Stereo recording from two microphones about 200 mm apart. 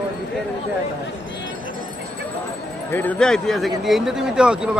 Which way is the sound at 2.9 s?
10° left (ahead or behind).